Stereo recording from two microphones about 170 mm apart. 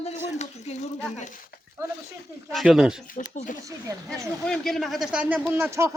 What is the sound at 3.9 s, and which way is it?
Speech, 20° right (ahead or behind).